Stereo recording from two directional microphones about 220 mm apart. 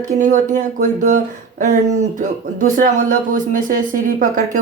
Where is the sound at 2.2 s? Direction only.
35° right (ahead or behind).